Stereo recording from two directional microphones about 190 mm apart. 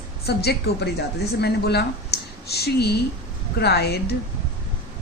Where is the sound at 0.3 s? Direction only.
55° left (ahead or behind).